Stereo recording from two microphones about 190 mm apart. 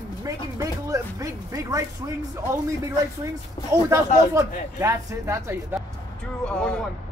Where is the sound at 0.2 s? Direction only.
15° right (ahead or behind).